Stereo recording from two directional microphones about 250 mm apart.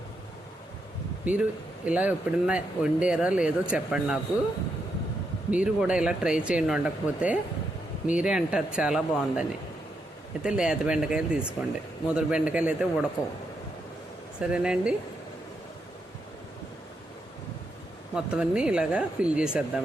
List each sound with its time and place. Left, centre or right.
1.2 s speech: centre
5.5 s speech: centre
14.3 s speech: centre
18.1 s speech: centre